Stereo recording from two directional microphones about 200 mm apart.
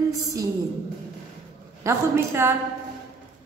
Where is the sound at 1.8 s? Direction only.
10° right (ahead or behind).